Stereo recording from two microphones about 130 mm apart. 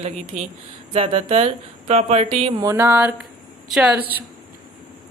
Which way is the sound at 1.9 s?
55° right (ahead or behind).